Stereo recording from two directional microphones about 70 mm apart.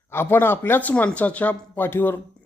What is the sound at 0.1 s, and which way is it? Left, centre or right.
Speech, left.